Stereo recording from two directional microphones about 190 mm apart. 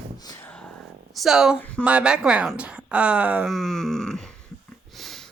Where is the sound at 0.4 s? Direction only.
5° left (ahead or behind).